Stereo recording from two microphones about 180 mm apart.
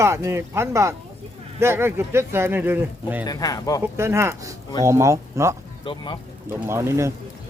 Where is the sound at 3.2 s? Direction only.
20° left (ahead or behind).